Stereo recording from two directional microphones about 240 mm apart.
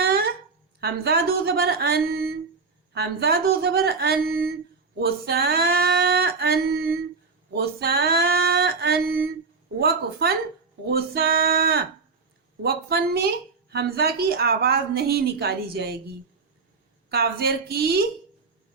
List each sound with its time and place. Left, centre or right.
0.0 s a sound: right
0.8 s a woman's voice: right
17.1 s a woman's voice: right